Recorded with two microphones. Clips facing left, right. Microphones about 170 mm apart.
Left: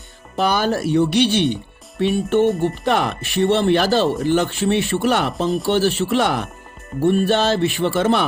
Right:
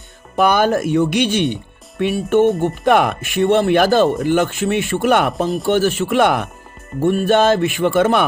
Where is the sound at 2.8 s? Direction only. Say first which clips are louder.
Right 5 dB; 55° right (ahead or behind).